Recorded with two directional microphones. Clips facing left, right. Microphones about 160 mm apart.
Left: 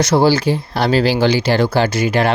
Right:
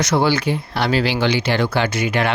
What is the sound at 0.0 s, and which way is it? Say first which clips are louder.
Speech: left 4 dB; 35° left (ahead or behind).